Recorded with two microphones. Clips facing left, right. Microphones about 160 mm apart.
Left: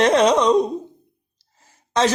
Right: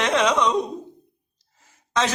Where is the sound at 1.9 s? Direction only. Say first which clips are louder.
Left 5 dB; 35° left (ahead or behind).